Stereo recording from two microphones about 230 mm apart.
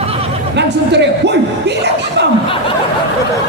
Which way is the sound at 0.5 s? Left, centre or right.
Right.